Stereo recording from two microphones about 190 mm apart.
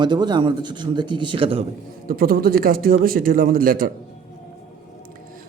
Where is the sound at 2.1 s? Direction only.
50° right (ahead or behind).